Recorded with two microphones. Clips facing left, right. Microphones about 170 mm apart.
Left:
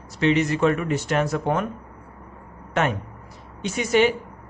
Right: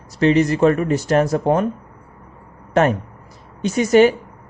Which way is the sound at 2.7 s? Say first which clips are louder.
Right 7 dB; 40° right (ahead or behind).